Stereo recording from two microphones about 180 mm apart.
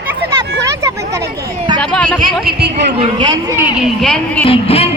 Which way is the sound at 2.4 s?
60° right (ahead or behind).